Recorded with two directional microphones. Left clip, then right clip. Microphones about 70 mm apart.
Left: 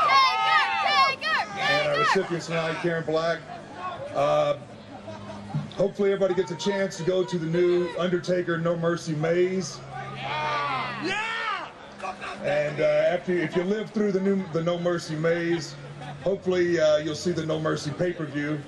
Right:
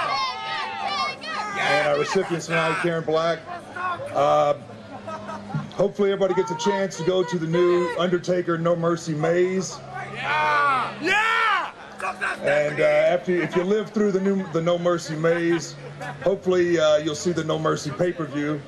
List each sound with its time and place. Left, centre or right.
0.1 s run: left
1.5 s a sound: right
2.1 s a man's voice: right
5.8 s a man's voice: right
10.2 s a man's voice: right